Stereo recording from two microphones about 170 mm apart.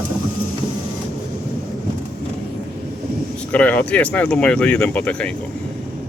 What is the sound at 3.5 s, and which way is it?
Speech, 10° left (ahead or behind).